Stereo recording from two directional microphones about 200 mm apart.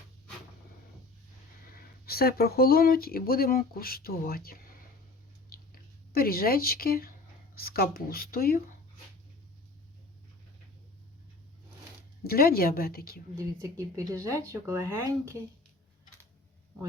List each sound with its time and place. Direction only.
1.6 s speech: 45° left (ahead or behind)
6.1 s speech: 50° left (ahead or behind)
12.2 s speech: 50° left (ahead or behind)
13.3 s speech: 15° right (ahead or behind)